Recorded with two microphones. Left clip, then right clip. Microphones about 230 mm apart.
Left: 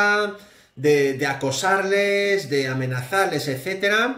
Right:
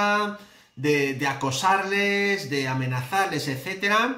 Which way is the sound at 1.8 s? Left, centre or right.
Right.